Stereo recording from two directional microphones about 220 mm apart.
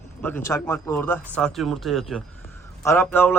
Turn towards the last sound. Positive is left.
turn(degrees=10)  # may be behind; listen again after turning